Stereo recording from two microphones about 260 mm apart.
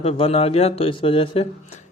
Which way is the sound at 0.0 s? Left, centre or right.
Left.